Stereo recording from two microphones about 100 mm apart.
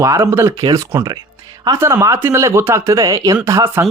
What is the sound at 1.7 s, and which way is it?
Speech, 30° right (ahead or behind).